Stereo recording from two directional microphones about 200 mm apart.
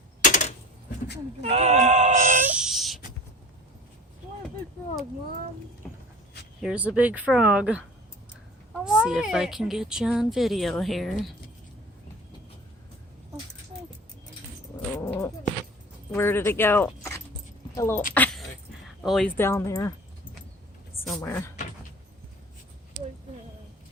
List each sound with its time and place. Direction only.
0.3 s a sound: 40° left (ahead or behind)
1.4 s speech: 35° right (ahead or behind)
2.5 s owl: 5° right (ahead or behind)
6.6 s speech: 5° right (ahead or behind)
8.8 s speech: 5° right (ahead or behind)
14.9 s cat: 10° left (ahead or behind)
16.1 s speech: 10° left (ahead or behind)
18.1 s a sound: 10° left (ahead or behind)
19.0 s speech: centre (ahead or behind)
19.4 s speech: 10° left (ahead or behind)
21.2 s speech: 15° left (ahead or behind)